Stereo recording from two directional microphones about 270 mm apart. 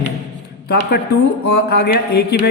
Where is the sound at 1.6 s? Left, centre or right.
Left.